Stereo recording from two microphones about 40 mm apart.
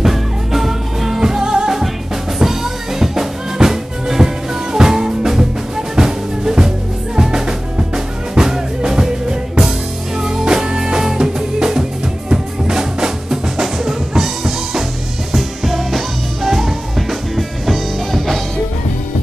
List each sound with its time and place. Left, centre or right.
0.0 s music: centre
12.3 s drum: centre
15.3 s music: centre